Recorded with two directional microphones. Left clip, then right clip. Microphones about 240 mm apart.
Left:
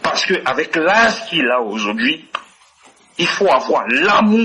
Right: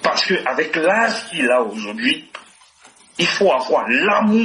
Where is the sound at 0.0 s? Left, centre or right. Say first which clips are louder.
Left 1 dB; left.